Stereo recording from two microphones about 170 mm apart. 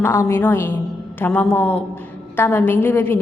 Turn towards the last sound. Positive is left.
turn(degrees=10)  # may be behind; listen again after turning